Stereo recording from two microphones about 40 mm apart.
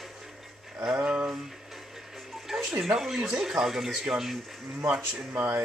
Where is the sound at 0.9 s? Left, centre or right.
Right.